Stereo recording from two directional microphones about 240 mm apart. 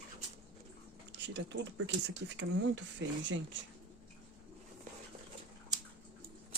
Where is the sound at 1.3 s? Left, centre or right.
Right.